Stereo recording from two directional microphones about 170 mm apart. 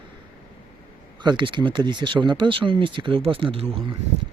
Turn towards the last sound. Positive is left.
turn(degrees=-35)  # may be behind; listen again after turning